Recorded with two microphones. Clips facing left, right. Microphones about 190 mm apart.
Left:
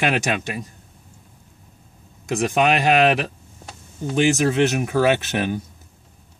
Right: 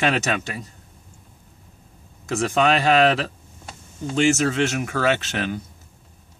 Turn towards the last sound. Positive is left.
turn(degrees=20)  # may be behind; listen again after turning